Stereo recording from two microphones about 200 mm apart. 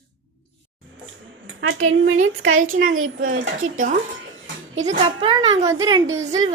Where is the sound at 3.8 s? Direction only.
40° right (ahead or behind).